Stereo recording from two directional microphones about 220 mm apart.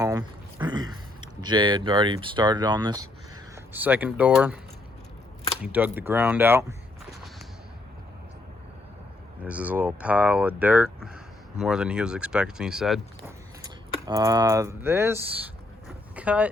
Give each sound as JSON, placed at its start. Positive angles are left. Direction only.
{"t": 0.0, "sound": "speech", "side_deg": -15}
{"t": 5.6, "sound": "speech", "side_deg": -5}
{"t": 9.4, "sound": "speech", "side_deg": -5}
{"t": 14.1, "sound": "speech", "side_deg": -15}